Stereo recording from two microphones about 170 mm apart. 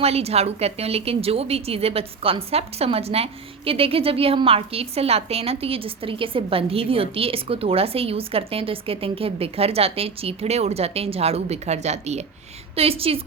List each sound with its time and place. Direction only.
0.0 s a woman's voice: 35° right (ahead or behind)